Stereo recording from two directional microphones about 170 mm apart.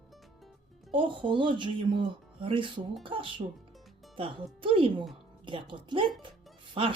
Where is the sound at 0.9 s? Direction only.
30° right (ahead or behind).